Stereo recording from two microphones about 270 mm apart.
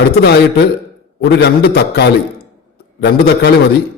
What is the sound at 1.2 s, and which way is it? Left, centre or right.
Speech, left.